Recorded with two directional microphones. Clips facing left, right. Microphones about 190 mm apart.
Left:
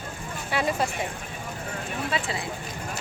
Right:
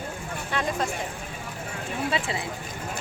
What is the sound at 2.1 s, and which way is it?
Speech, 25° right (ahead or behind).